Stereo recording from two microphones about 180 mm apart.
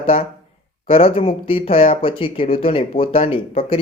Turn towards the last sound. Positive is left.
turn(degrees=30)  # may be behind; listen again after turning